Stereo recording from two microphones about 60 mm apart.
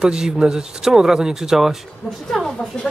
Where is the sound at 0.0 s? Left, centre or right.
Centre.